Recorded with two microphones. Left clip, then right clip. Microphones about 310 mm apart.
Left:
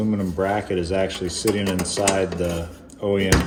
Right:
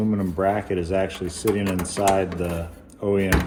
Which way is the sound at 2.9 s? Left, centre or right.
Centre.